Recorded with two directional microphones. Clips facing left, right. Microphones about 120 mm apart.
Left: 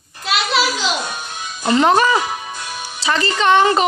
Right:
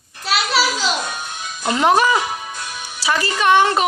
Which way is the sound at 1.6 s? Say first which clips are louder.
Left 2 dB; 5° right (ahead or behind).